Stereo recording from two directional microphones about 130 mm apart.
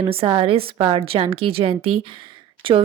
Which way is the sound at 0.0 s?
45° right (ahead or behind).